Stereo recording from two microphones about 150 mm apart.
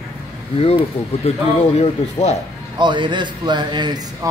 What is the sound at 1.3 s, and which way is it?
Speech, 45° left (ahead or behind).